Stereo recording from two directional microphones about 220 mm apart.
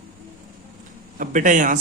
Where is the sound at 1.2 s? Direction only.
35° right (ahead or behind).